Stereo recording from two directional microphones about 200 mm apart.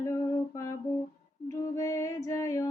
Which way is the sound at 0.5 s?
15° left (ahead or behind).